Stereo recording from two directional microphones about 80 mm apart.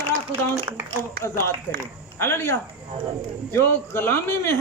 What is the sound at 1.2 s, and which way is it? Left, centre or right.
A man's voice, left.